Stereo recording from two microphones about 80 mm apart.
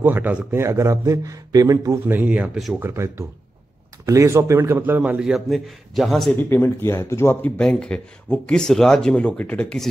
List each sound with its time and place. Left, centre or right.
0.0 s a man's voice: right
0.5 s speech: right
2.0 s speech: centre
2.8 s speech: right
5.2 s a man's voice: centre
6.5 s speech: left
7.4 s speech: centre